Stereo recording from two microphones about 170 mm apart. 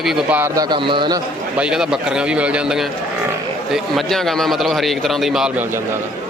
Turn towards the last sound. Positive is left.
turn(degrees=-5)  # may be behind; listen again after turning